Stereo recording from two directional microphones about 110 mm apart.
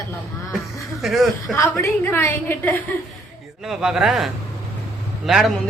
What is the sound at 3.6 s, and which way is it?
A man's voice, 5° right (ahead or behind).